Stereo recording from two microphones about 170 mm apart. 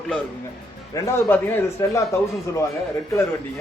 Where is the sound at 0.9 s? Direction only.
15° left (ahead or behind).